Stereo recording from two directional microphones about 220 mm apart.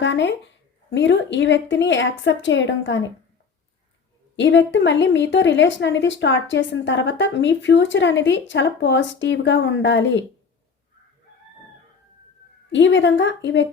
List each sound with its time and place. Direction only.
0.0 s speech: 55° left (ahead or behind)
4.4 s speech: 55° left (ahead or behind)
12.7 s speech: 55° left (ahead or behind)